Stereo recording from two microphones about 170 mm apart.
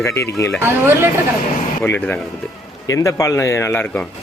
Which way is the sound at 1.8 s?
10° left (ahead or behind).